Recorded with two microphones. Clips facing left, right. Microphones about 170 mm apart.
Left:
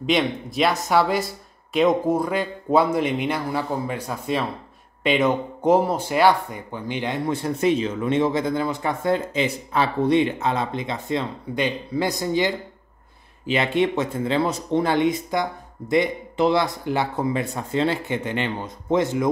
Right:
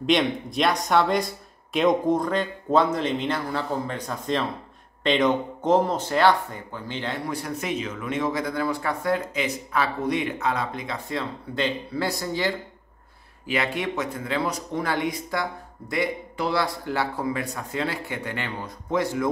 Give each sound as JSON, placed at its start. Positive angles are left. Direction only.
{"t": 0.0, "sound": "speech", "side_deg": 0}